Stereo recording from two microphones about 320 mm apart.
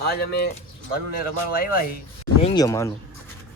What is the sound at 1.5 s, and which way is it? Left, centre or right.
Speech, left.